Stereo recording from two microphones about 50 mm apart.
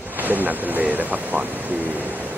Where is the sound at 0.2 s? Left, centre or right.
Right.